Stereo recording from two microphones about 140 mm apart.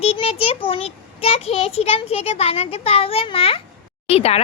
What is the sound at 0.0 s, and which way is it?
Speech, 45° left (ahead or behind).